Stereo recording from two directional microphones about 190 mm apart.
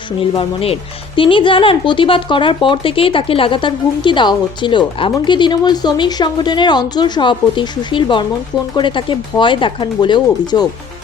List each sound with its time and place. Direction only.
0.2 s speech: 30° left (ahead or behind)